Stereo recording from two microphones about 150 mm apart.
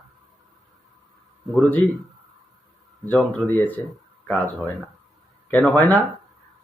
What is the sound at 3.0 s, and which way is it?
Speech, 10° left (ahead or behind).